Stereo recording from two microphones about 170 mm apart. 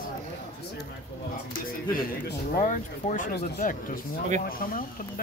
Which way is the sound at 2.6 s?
45° left (ahead or behind).